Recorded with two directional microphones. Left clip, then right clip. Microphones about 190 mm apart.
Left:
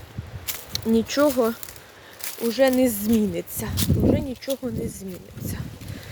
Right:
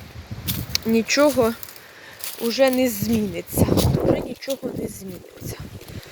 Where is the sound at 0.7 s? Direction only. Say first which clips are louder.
Right 3 dB; centre (ahead or behind).